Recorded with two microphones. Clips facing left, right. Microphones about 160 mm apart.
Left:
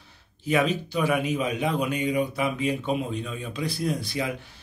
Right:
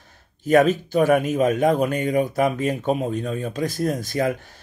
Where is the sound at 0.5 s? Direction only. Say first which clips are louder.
Right 7 dB; 45° right (ahead or behind).